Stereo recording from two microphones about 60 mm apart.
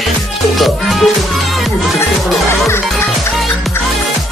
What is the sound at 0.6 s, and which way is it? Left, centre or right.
Music, centre.